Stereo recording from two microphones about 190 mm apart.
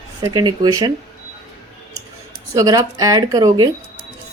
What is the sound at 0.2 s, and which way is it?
Speech, 20° right (ahead or behind).